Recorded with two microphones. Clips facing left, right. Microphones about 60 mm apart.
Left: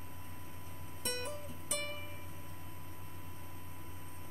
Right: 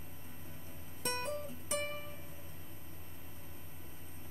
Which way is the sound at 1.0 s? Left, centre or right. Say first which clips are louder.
Right 3 dB; right.